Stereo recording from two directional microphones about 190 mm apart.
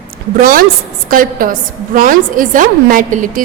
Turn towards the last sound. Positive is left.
turn(degrees=-45)  # may be behind; listen again after turning